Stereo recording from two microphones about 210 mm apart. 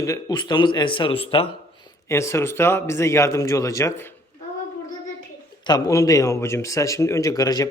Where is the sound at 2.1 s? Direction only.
15° left (ahead or behind).